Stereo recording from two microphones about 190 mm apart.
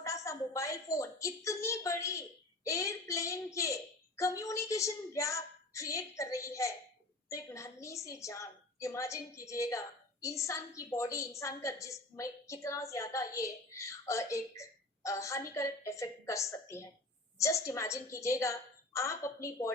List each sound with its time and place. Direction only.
0.0 s a woman's voice: 15° left (ahead or behind)